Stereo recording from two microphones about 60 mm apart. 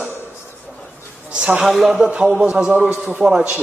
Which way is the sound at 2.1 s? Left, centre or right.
Centre.